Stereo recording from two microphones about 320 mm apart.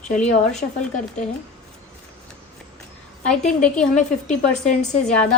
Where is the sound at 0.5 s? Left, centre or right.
Centre.